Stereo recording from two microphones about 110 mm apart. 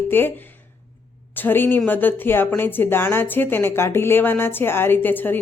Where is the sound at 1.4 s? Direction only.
20° left (ahead or behind).